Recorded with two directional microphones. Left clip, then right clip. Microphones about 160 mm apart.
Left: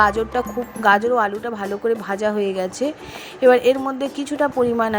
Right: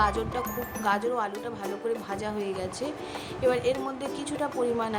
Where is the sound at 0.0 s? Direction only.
40° left (ahead or behind).